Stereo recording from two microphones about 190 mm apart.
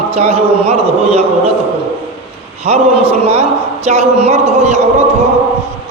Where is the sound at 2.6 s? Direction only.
35° right (ahead or behind).